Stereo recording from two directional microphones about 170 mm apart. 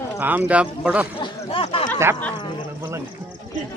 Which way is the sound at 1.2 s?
30° left (ahead or behind).